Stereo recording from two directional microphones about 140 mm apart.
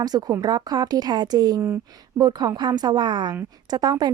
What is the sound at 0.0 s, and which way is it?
A woman's voice, 30° right (ahead or behind).